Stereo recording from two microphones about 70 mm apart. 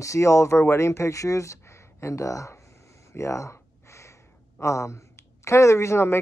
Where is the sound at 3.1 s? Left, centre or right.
Left.